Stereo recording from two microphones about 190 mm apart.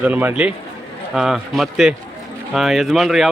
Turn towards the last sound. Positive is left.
turn(degrees=0)  # may be behind; listen again after turning